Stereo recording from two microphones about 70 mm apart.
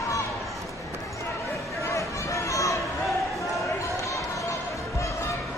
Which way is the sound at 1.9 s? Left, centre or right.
Left.